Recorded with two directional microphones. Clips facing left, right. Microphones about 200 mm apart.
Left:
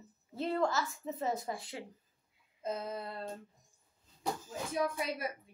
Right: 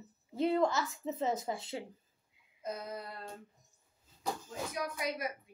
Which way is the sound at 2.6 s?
25° left (ahead or behind).